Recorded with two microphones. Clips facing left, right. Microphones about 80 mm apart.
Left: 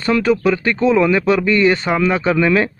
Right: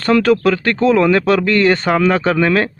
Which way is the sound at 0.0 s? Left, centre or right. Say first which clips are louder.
Right 2 dB; right.